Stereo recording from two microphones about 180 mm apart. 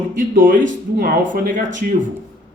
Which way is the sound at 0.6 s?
90° right.